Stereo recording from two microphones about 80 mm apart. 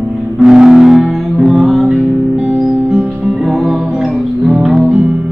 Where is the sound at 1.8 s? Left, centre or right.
Centre.